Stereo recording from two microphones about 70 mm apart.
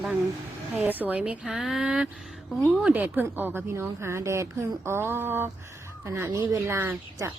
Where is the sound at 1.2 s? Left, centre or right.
Centre.